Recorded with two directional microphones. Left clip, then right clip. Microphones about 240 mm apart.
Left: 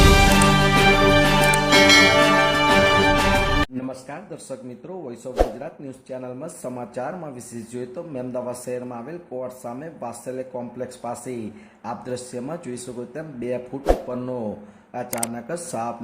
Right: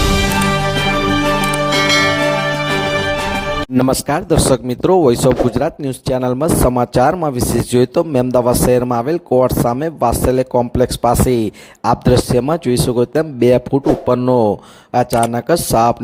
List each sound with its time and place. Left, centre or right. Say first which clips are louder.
0.0 s music: even; centre
3.8 s speech: right 18 dB; right
14.9 s speech: right 15 dB; right